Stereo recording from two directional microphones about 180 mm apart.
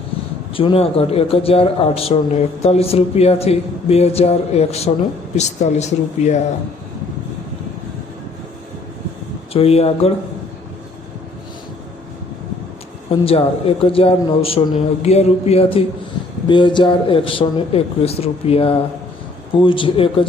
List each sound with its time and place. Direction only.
0.5 s speech: 30° left (ahead or behind)
9.5 s speech: 35° left (ahead or behind)
13.1 s speech: 30° left (ahead or behind)